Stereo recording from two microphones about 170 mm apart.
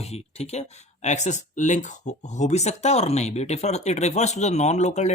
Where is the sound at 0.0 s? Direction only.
40° left (ahead or behind).